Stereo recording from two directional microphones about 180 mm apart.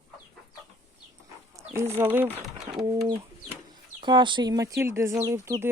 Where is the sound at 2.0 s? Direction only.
10° right (ahead or behind).